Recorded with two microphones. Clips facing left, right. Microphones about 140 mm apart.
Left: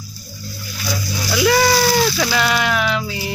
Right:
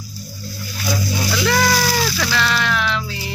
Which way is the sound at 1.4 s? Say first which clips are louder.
Left 4 dB; 10° left (ahead or behind).